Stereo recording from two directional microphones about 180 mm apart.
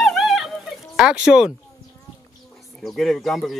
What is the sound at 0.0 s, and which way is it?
Dog, centre (ahead or behind).